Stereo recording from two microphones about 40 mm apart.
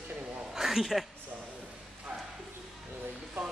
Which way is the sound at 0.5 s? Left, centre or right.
Centre.